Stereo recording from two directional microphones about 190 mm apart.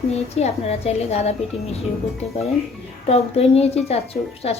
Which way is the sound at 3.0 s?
35° left (ahead or behind).